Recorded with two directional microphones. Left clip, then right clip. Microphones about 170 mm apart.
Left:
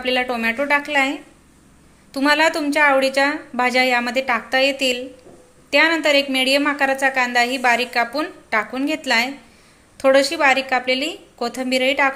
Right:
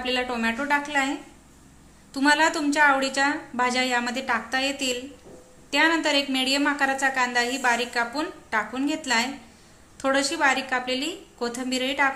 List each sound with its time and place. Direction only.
0.0 s a woman's voice: 15° left (ahead or behind)